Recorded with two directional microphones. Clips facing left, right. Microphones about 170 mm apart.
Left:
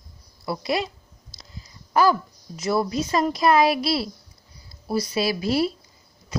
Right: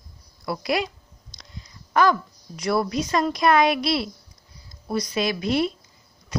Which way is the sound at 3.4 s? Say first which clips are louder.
Even; 30° left (ahead or behind).